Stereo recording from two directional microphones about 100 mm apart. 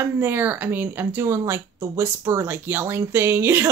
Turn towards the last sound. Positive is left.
turn(degrees=-25)  # may be behind; listen again after turning